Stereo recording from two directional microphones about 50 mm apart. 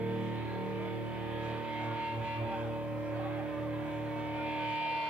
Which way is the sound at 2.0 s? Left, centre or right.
Right.